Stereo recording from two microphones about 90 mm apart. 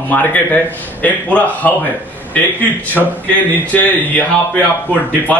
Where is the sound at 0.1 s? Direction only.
20° left (ahead or behind).